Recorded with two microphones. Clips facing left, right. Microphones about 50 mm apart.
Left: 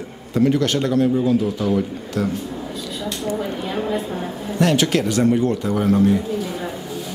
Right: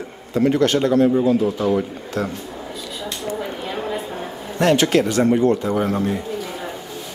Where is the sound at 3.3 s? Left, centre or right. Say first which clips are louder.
Left 2 dB; centre.